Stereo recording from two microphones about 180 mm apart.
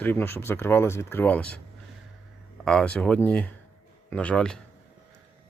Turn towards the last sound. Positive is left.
turn(degrees=5)  # may be behind; listen again after turning